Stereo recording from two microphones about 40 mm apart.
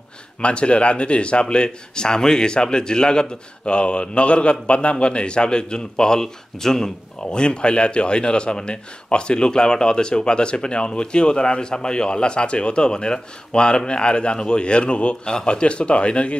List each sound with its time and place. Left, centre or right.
0.4 s speech: left